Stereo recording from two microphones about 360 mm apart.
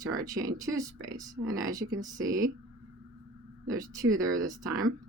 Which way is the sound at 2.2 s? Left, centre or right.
Right.